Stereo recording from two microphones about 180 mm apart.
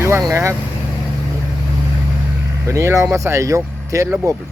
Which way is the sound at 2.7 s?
15° right (ahead or behind).